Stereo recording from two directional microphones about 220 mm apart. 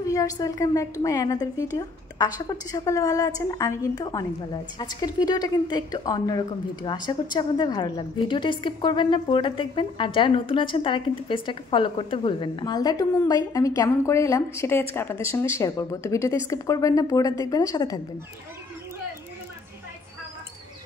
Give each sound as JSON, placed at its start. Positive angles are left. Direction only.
{"t": 0.0, "sound": "a woman's voice", "side_deg": 15}